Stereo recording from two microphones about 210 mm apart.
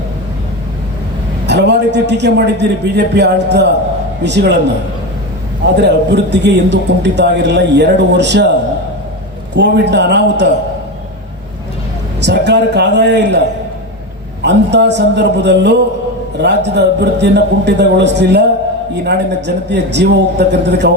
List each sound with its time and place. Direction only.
1.5 s a man's voice: 55° right (ahead or behind)
5.6 s a man's voice: 55° right (ahead or behind)
9.6 s a man's voice: 55° right (ahead or behind)
12.2 s a man's voice: 55° right (ahead or behind)
14.4 s a man's voice: 55° right (ahead or behind)